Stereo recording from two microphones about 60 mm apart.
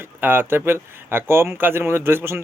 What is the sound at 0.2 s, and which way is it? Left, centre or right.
A man's voice, right.